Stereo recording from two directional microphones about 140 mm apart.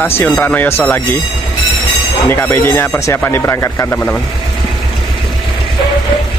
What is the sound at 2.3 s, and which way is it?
Speech, 15° left (ahead or behind).